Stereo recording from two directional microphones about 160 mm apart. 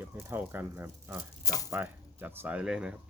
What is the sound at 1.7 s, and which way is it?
Speech, 10° right (ahead or behind).